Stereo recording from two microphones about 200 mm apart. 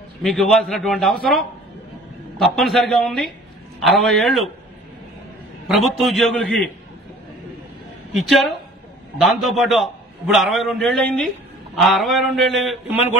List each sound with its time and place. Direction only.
0.2 s a man's voice: centre (ahead or behind)
2.3 s a man's voice: centre (ahead or behind)
5.7 s a man's voice: centre (ahead or behind)
8.1 s a man's voice: centre (ahead or behind)